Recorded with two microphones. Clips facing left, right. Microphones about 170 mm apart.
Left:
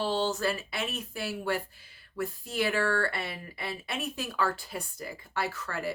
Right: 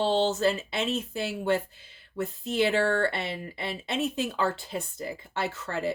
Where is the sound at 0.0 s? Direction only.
25° right (ahead or behind).